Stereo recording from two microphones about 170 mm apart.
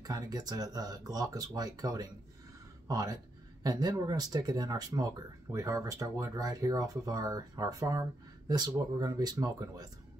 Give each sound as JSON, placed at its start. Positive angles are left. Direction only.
{"t": 0.0, "sound": "speech", "side_deg": -20}